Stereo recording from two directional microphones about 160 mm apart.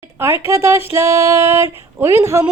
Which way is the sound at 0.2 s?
15° right (ahead or behind).